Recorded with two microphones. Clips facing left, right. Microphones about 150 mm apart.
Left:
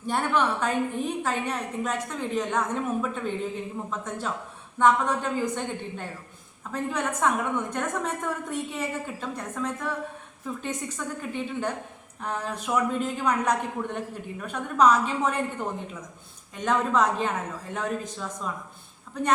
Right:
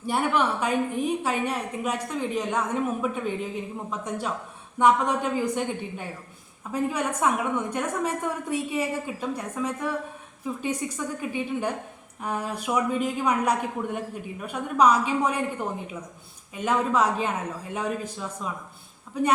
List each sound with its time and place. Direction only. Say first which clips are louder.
0.0 s a woman's voice: right 1 dB; 10° right (ahead or behind)
16.6 s a woman's voice: even; 10° right (ahead or behind)